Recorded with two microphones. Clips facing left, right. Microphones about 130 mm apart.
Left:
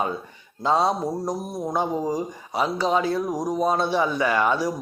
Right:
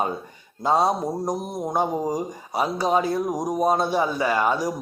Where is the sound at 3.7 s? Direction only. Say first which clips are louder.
Right 1 dB; 40° right (ahead or behind).